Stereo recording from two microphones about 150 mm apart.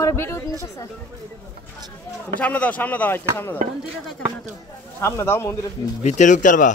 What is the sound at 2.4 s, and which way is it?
Speech, 10° left (ahead or behind).